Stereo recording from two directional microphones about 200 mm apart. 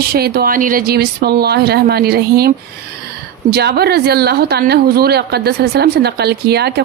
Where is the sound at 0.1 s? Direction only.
50° right (ahead or behind).